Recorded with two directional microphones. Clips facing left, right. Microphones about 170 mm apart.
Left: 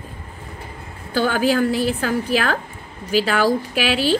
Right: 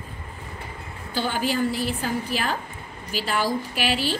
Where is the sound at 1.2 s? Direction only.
90° left.